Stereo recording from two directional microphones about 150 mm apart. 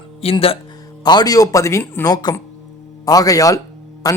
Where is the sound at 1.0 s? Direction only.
25° left (ahead or behind).